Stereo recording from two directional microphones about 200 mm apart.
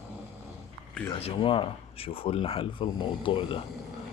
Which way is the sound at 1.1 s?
25° left (ahead or behind).